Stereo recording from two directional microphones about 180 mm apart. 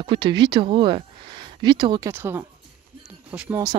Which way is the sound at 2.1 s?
15° right (ahead or behind).